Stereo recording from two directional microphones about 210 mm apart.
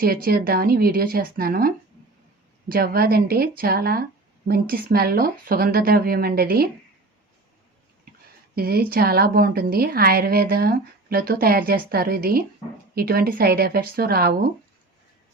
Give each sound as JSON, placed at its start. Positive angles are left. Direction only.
{"t": 0.0, "sound": "speech", "side_deg": -45}
{"t": 8.5, "sound": "speech", "side_deg": -45}